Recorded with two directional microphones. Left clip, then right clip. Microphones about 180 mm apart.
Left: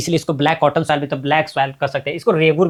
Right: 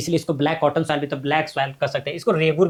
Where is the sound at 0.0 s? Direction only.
50° left (ahead or behind).